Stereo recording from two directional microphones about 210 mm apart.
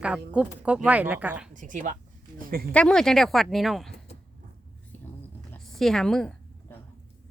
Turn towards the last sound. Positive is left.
turn(degrees=5)  # may be behind; listen again after turning